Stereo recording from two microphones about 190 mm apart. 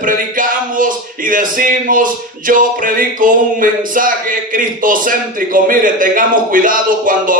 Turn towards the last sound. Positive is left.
turn(degrees=-45)  # may be behind; listen again after turning